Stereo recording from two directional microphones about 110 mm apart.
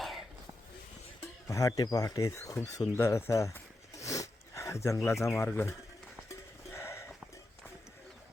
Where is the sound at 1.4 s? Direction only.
30° left (ahead or behind).